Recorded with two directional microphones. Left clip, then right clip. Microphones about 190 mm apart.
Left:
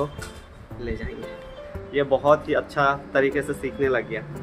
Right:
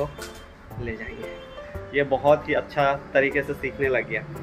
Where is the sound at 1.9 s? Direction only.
15° left (ahead or behind).